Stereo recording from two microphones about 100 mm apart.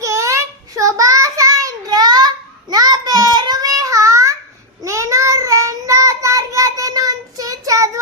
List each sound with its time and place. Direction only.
0.0 s child singing: 30° right (ahead or behind)